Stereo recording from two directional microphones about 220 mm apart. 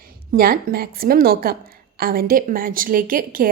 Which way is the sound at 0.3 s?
40° right (ahead or behind).